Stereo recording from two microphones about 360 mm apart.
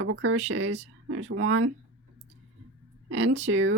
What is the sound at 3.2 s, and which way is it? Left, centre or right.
Speech, right.